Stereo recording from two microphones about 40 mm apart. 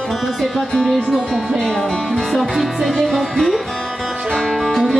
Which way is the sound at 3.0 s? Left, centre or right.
Centre.